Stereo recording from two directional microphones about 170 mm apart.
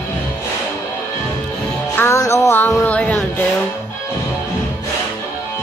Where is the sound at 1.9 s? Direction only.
15° left (ahead or behind).